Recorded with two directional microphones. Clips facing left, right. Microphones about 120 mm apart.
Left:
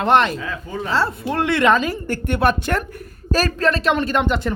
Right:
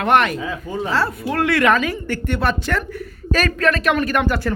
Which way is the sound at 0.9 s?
25° left (ahead or behind).